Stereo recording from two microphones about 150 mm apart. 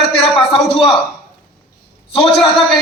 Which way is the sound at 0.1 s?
40° left (ahead or behind).